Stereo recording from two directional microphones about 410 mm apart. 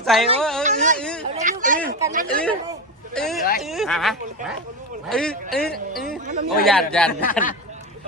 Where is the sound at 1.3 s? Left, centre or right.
Centre.